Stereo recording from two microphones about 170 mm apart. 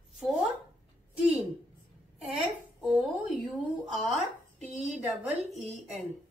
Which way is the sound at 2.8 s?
Centre (ahead or behind).